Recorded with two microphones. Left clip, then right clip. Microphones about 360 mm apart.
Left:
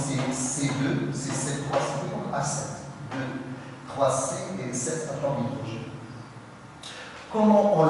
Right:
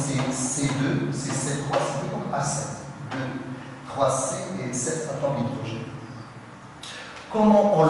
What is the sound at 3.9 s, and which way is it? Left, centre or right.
Speech, centre.